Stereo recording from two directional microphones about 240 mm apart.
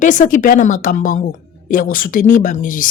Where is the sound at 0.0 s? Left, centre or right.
Left.